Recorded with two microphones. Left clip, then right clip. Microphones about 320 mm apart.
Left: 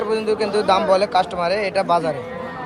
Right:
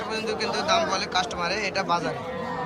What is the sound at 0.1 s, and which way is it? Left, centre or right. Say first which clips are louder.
Speech: left 7 dB; centre.